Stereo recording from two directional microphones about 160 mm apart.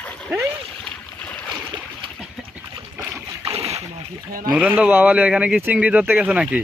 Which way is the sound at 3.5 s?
40° right (ahead or behind).